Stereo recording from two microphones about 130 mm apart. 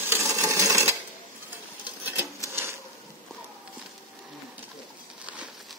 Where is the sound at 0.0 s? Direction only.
20° right (ahead or behind).